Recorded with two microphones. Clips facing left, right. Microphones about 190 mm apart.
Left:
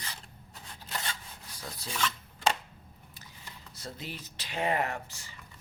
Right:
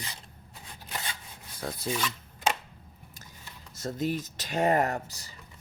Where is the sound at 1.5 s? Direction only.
55° right (ahead or behind).